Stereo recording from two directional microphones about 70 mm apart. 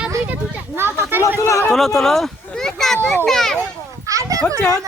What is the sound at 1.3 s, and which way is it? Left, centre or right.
Speech, left.